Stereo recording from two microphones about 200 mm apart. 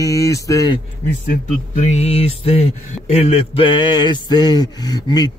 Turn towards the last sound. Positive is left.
turn(degrees=20)  # may be behind; listen again after turning